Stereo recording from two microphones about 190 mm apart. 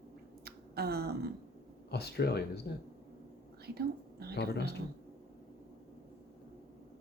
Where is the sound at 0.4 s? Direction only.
55° right (ahead or behind).